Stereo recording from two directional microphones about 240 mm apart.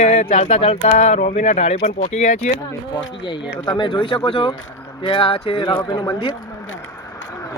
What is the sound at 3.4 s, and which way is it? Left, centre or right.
Speech, left.